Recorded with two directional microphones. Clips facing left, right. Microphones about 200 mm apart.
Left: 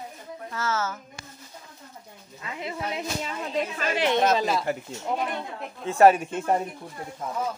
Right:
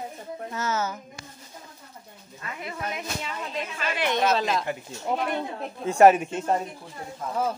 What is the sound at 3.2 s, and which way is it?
Speech, 40° left (ahead or behind).